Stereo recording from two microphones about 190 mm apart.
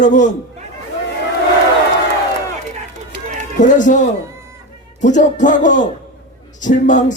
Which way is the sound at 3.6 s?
40° left (ahead or behind).